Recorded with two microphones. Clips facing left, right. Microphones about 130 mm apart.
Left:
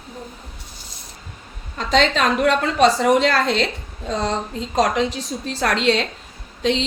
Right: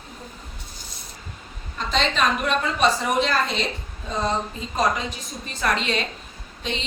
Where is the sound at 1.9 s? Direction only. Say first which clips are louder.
Left 5 dB; 90° left.